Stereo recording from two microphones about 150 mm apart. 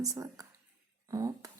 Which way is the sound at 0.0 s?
25° right (ahead or behind).